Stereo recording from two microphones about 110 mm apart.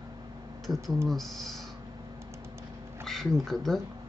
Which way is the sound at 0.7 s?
40° right (ahead or behind).